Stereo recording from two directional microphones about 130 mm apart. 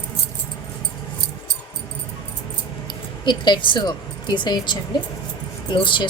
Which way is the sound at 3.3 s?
35° left (ahead or behind).